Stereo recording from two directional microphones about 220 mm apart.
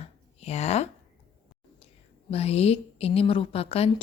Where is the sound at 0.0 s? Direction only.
30° left (ahead or behind).